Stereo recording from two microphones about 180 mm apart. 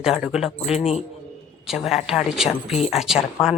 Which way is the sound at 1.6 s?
Centre (ahead or behind).